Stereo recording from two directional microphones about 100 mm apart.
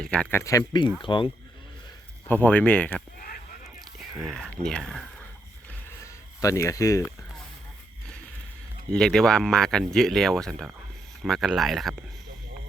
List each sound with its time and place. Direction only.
0.1 s speech: 15° left (ahead or behind)
0.3 s speech: 35° left (ahead or behind)
0.7 s speech: 50° left (ahead or behind)
2.2 s speech: 15° left (ahead or behind)
3.8 s sheep: 5° right (ahead or behind)
4.4 s speech: 5° left (ahead or behind)
6.4 s speech: 30° left (ahead or behind)
8.9 s speech: 5° left (ahead or behind)